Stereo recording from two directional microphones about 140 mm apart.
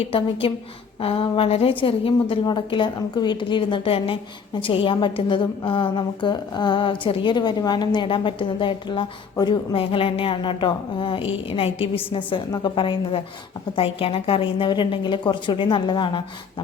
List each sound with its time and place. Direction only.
0.1 s a woman's voice: 40° left (ahead or behind)